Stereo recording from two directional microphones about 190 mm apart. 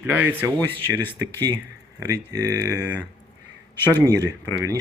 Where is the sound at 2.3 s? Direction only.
20° right (ahead or behind).